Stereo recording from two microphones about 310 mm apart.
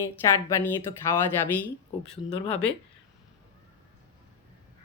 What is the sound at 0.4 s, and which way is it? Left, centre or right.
Speech, centre.